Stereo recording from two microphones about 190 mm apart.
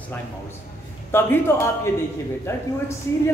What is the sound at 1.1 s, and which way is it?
A man's voice, 10° left (ahead or behind).